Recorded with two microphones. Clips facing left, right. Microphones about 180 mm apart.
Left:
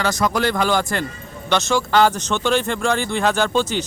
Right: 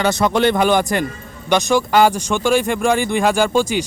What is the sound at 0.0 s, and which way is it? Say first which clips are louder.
Speech: right 4 dB; 25° right (ahead or behind).